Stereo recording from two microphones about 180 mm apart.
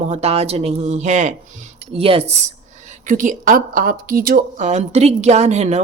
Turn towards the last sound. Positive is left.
turn(degrees=-40)  # may be behind; listen again after turning